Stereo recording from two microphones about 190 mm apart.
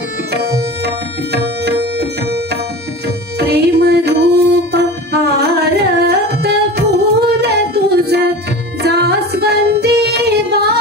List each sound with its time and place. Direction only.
0.3 s tabla: 60° right (ahead or behind)
3.3 s music: 60° right (ahead or behind)
8.8 s female singing: 55° right (ahead or behind)